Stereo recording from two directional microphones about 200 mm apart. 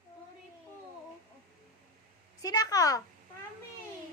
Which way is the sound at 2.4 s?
20° left (ahead or behind).